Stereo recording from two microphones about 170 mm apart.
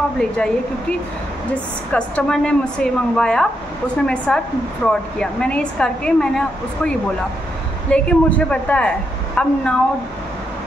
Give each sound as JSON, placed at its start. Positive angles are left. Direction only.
{"t": 0.2, "sound": "speech", "side_deg": 5}